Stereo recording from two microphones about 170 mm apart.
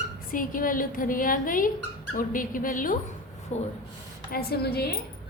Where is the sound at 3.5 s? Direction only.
40° left (ahead or behind).